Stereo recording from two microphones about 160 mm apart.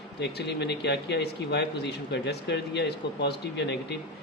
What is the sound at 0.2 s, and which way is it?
Speech, 90° left.